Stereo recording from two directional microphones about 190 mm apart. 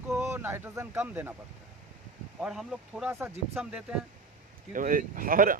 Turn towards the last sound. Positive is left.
turn(degrees=-45)  # may be behind; listen again after turning